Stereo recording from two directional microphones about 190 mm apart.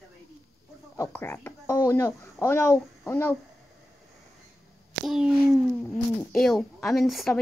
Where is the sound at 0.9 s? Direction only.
15° left (ahead or behind).